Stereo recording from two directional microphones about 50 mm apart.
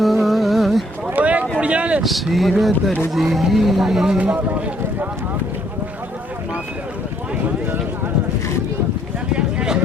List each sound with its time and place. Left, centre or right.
0.0 s music: centre
1.1 s a sound: right
2.0 s speech: centre
9.3 s speech: centre